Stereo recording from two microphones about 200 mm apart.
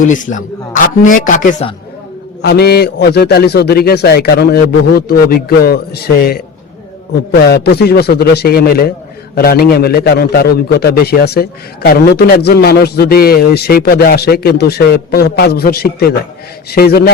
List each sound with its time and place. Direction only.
0.0 s speech: 40° left (ahead or behind)
2.4 s a man's voice: 55° left (ahead or behind)